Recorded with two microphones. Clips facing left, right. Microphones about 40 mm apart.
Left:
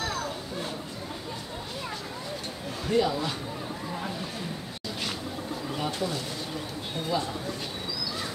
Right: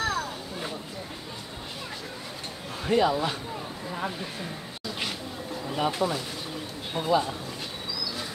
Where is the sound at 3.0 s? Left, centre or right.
Right.